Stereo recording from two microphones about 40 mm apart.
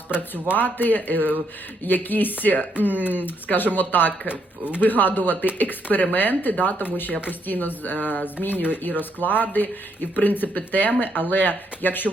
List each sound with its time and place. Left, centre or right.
0.5 s speech: left